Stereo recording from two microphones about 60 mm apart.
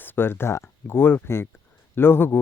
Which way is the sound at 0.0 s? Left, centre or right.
Left.